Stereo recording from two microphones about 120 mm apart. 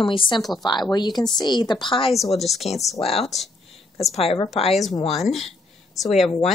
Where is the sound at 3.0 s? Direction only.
55° left (ahead or behind).